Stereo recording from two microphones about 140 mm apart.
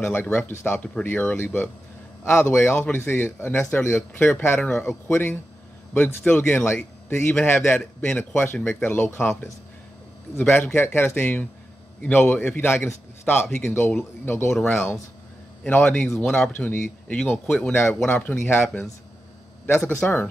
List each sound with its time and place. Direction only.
0.0 s a man's voice: 15° left (ahead or behind)
10.3 s a man's voice: 15° left (ahead or behind)